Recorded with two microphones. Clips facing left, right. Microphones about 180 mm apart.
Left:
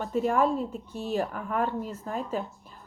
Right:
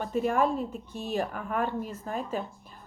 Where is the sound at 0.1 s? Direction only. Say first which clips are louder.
Left 1 dB; 15° right (ahead or behind).